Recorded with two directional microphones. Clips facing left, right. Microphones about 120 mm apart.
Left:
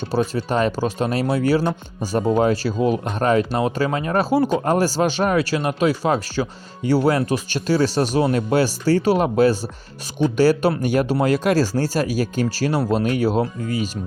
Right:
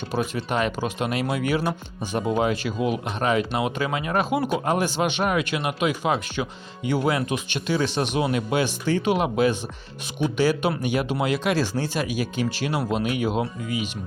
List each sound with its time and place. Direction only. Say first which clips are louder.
0.3 s speech: left 4 dB; 35° left (ahead or behind)